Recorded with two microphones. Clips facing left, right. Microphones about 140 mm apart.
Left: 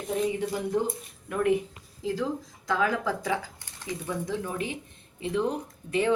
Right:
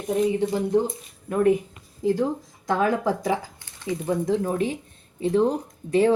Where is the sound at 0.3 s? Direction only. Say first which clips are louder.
Right 6 dB; 30° right (ahead or behind).